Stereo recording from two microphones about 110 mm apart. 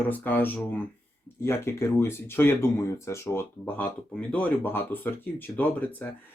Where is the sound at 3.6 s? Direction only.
15° left (ahead or behind).